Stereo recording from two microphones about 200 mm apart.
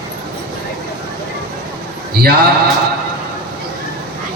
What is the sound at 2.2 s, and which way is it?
Speech, 50° right (ahead or behind).